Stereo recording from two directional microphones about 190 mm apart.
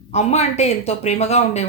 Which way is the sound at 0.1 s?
35° left (ahead or behind).